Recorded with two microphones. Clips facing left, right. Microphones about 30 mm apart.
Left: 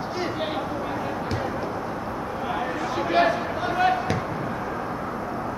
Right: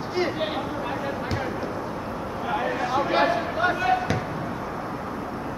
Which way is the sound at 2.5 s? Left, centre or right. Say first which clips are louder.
Right 4 dB; centre.